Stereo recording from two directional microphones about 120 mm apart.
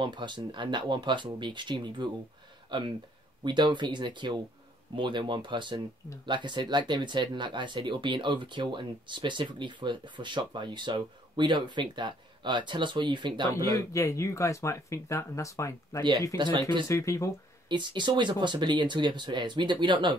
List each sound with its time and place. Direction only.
0.0 s speech: 40° right (ahead or behind)
13.6 s speech: 25° left (ahead or behind)
16.0 s speech: 35° right (ahead or behind)
16.8 s speech: 25° left (ahead or behind)
17.6 s speech: 40° right (ahead or behind)